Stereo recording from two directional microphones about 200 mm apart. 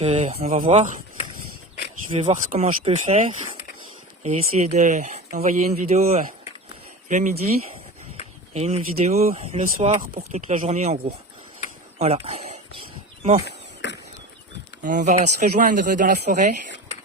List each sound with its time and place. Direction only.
0.0 s speech: 30° right (ahead or behind)
2.1 s speech: 35° right (ahead or behind)
4.2 s speech: 35° right (ahead or behind)
8.5 s speech: 30° right (ahead or behind)
13.8 s a sound: 60° left (ahead or behind)
14.8 s speech: 40° right (ahead or behind)